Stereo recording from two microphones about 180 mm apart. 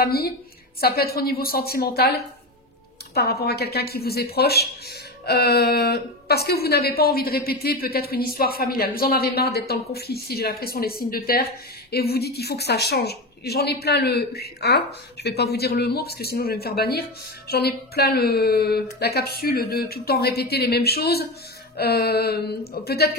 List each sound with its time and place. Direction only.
0.0 s a woman's voice: 60° left (ahead or behind)